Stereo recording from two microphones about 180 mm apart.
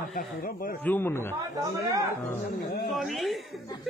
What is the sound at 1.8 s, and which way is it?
Speech, 20° right (ahead or behind).